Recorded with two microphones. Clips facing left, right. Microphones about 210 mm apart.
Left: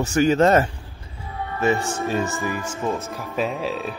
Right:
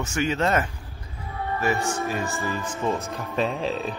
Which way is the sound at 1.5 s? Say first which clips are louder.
Left 4 dB; 25° left (ahead or behind).